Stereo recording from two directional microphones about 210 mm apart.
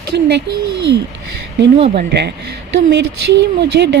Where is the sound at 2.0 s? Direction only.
50° right (ahead or behind).